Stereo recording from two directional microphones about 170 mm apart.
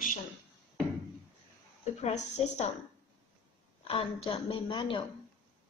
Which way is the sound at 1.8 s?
40° left (ahead or behind).